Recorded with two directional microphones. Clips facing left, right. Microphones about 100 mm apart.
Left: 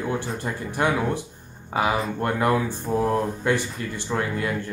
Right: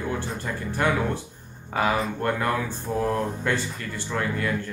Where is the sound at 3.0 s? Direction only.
20° left (ahead or behind).